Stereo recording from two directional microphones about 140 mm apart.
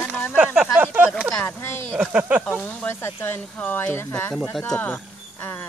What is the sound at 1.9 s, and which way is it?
Speech, 10° right (ahead or behind).